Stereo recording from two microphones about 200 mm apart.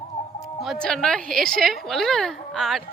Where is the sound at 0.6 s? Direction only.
5° left (ahead or behind).